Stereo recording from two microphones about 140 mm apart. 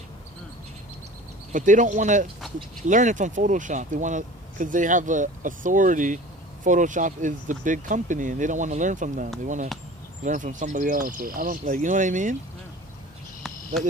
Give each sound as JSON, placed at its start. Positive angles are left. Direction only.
{"t": 1.5, "sound": "speech", "side_deg": -65}